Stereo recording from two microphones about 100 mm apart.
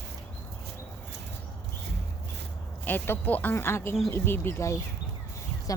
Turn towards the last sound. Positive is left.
turn(degrees=35)  # may be behind; listen again after turning